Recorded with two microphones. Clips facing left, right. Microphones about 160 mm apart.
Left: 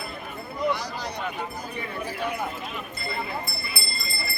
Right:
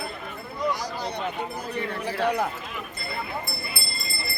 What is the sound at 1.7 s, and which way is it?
Speech, 85° right.